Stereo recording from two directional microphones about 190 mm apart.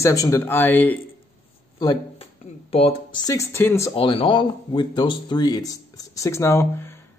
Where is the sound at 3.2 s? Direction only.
15° left (ahead or behind).